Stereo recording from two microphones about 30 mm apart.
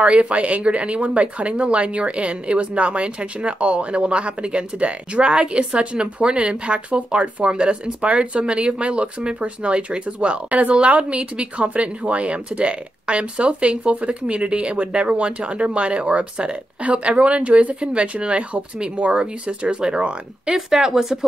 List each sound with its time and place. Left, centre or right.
0.0 s speech: right
19.8 s speech: right
20.5 s speech: centre